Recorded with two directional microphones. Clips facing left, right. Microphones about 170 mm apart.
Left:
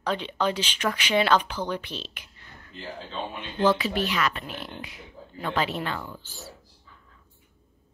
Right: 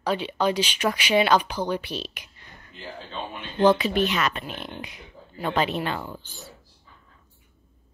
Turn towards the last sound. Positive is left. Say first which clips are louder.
# right 2 dB
turn(degrees=-20)  # may be behind; listen again after turning